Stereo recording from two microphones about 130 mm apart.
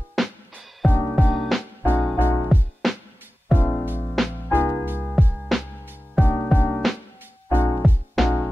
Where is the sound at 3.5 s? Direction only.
15° left (ahead or behind).